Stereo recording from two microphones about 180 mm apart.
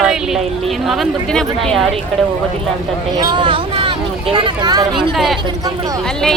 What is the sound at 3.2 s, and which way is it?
Speech, 25° right (ahead or behind).